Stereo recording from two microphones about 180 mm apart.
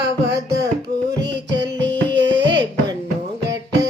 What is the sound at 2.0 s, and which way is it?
Music, 75° right (ahead or behind).